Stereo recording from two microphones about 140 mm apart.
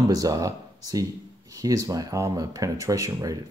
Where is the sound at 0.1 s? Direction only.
25° right (ahead or behind).